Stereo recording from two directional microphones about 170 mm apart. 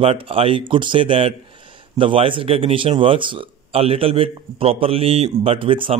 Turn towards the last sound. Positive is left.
turn(degrees=-30)  # may be behind; listen again after turning